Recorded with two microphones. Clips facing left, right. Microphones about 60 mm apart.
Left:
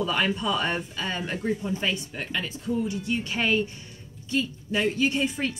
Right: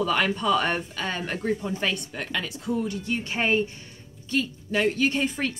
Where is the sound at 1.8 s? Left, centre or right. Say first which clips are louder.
Right 1 dB; right.